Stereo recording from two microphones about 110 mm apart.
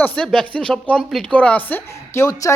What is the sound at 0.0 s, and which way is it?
A woman's voice, 15° left (ahead or behind).